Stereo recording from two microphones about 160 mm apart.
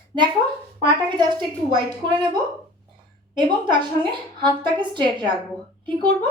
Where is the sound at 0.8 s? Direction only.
30° right (ahead or behind).